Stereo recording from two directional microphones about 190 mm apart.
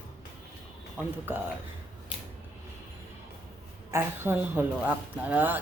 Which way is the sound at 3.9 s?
10° right (ahead or behind).